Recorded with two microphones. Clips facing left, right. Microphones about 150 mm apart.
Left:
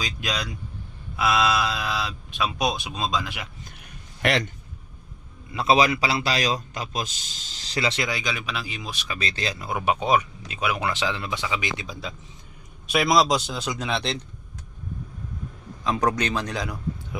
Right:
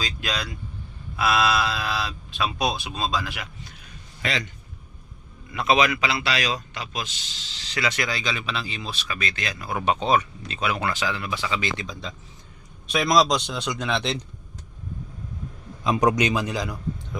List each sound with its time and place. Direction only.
0.0 s speech: 15° left (ahead or behind)
4.2 s a man's voice: 65° left (ahead or behind)
5.5 s a man's voice: 30° left (ahead or behind)
9.1 s speech: 30° left (ahead or behind)
9.7 s speech: 10° left (ahead or behind)
10.9 s speech: 20° left (ahead or behind); by 14.2 s centre (ahead or behind)
15.8 s a man's voice: 15° right (ahead or behind); by 17.2 s centre (ahead or behind)